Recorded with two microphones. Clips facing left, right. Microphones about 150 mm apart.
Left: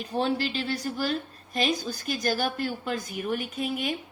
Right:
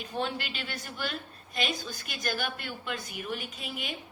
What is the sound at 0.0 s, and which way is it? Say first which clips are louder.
A woman's voice: left 7 dB; 35° left (ahead or behind).